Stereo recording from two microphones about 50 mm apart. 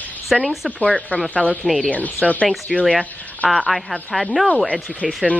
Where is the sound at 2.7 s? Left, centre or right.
Centre.